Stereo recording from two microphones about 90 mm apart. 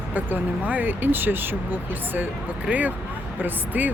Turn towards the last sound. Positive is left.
turn(degrees=-20)  # may be behind; listen again after turning